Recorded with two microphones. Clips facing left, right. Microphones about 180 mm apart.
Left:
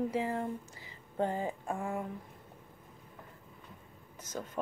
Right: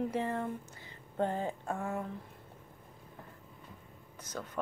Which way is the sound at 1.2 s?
15° left (ahead or behind).